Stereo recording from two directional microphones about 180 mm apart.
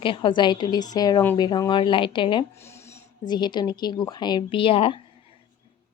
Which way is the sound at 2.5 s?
15° left (ahead or behind).